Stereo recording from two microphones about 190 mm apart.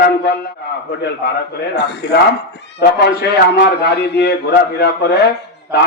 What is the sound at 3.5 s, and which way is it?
Speech, 60° left (ahead or behind).